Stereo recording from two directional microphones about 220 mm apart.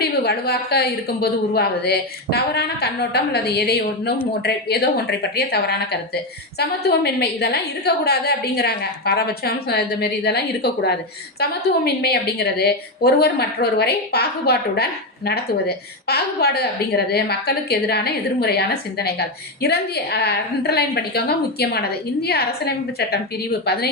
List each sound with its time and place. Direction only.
0.0 s a woman's voice: 45° left (ahead or behind)